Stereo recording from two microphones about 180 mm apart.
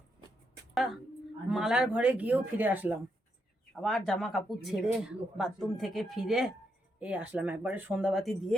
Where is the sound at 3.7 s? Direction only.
Centre (ahead or behind).